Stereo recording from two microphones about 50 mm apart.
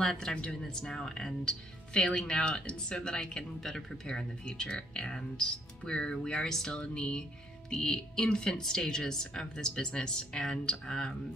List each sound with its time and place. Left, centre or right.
0.0 s speech: centre